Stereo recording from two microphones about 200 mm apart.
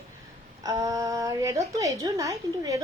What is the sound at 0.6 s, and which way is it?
A woman's voice, 15° right (ahead or behind).